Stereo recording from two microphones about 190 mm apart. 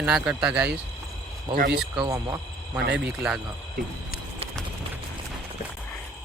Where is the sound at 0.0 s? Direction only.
5° right (ahead or behind).